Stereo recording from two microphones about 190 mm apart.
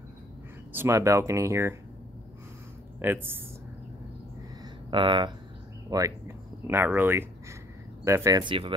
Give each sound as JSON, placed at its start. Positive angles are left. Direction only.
{"t": 0.7, "sound": "speech", "side_deg": -15}
{"t": 3.0, "sound": "speech", "side_deg": -10}
{"t": 4.9, "sound": "speech", "side_deg": -25}